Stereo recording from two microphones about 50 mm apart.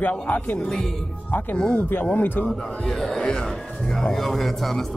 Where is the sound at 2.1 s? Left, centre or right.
Left.